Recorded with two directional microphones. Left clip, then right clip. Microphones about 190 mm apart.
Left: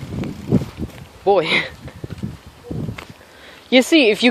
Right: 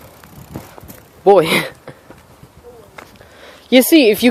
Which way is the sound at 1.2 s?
55° right (ahead or behind).